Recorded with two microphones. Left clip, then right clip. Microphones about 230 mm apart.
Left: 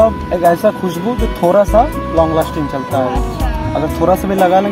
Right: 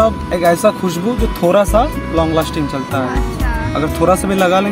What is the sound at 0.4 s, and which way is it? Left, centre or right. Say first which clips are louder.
Speech: left 1 dB; centre.